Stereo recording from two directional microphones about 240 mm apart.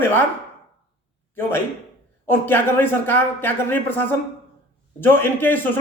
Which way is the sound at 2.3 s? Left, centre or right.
Centre.